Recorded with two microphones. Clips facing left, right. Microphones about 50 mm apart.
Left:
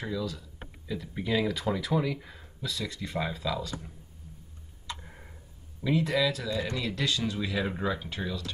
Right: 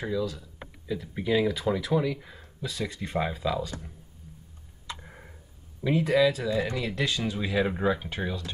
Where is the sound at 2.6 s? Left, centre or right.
Centre.